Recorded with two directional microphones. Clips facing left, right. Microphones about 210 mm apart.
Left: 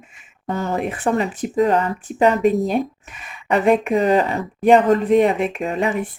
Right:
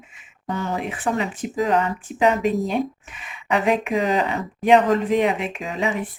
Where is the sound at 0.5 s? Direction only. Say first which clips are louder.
Left 4 dB; 45° left (ahead or behind).